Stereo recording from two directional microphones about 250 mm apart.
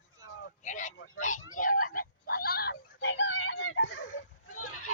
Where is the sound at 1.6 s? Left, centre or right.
Left.